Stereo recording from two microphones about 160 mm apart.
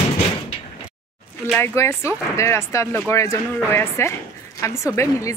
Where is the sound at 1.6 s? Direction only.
15° left (ahead or behind).